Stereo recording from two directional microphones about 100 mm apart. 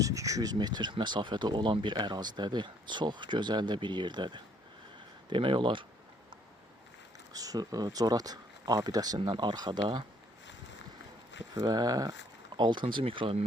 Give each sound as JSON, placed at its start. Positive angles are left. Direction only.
{"t": 0.0, "sound": "speech", "side_deg": -35}
{"t": 7.3, "sound": "speech", "side_deg": -35}
{"t": 11.5, "sound": "speech", "side_deg": -40}
{"t": 12.5, "sound": "speech", "side_deg": -50}